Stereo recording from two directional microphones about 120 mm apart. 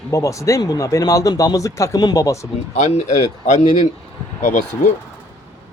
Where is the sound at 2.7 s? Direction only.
75° left (ahead or behind).